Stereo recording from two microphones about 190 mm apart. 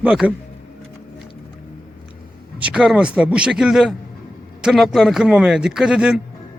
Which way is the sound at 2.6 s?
5° right (ahead or behind).